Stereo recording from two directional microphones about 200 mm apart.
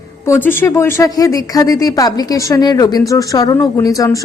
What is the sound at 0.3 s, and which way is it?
A woman's voice, 10° left (ahead or behind).